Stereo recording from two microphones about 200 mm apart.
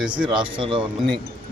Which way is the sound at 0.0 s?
5° right (ahead or behind).